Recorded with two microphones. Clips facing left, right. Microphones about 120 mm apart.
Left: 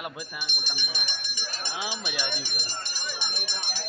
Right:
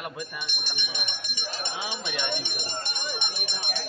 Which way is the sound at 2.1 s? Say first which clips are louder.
Right 2 dB; 25° right (ahead or behind).